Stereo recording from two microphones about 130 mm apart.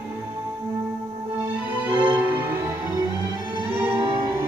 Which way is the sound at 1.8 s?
10° right (ahead or behind).